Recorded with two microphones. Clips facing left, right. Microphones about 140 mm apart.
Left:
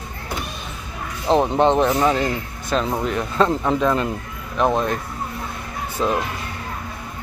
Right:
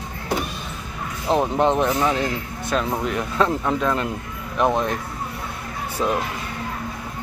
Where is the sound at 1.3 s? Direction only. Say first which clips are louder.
Left 3 dB; 25° left (ahead or behind).